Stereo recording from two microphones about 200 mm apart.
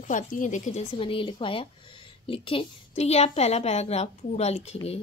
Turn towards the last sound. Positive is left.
turn(degrees=30)  # may be behind; listen again after turning